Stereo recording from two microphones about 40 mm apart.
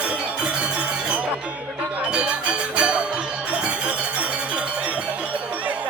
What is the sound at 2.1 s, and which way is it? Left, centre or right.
Music, right.